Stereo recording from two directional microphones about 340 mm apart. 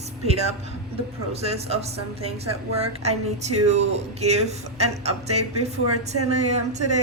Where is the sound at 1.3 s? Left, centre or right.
Centre.